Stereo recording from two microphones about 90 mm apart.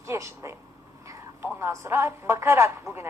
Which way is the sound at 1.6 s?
30° right (ahead or behind).